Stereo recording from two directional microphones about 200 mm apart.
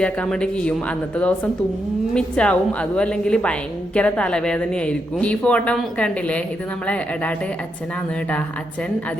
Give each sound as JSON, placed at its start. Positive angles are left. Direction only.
{"t": 0.0, "sound": "speech", "side_deg": 5}